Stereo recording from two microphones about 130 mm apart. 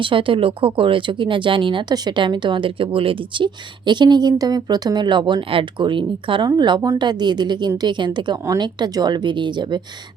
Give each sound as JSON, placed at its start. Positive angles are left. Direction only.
{"t": 0.0, "sound": "speech", "side_deg": -40}